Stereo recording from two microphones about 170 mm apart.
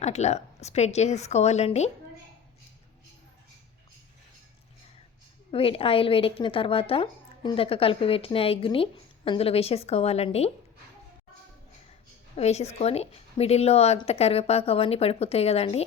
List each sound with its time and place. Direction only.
0.0 s a woman's voice: 40° left (ahead or behind)
5.5 s a woman's voice: 35° left (ahead or behind)
12.4 s a woman's voice: 40° left (ahead or behind)